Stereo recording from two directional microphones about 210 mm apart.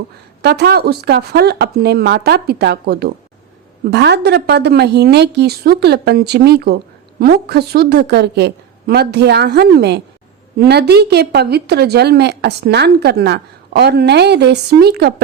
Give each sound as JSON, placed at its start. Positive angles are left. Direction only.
{"t": 0.4, "sound": "a woman's voice", "side_deg": -50}